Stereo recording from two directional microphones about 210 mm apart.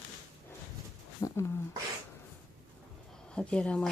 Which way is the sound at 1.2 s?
15° left (ahead or behind).